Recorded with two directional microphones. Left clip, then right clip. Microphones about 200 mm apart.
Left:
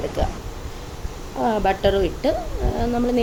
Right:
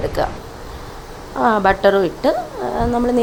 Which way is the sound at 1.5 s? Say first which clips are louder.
Right 6 dB; 5° right (ahead or behind).